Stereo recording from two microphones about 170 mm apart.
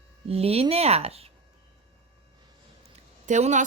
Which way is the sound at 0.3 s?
35° right (ahead or behind).